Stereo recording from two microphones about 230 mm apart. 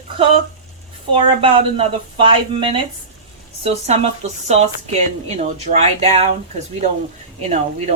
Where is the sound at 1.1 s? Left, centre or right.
Right.